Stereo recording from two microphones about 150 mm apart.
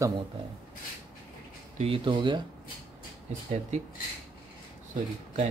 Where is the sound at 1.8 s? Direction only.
35° right (ahead or behind).